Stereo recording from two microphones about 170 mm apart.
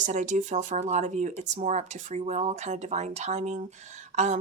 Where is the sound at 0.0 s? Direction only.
45° right (ahead or behind).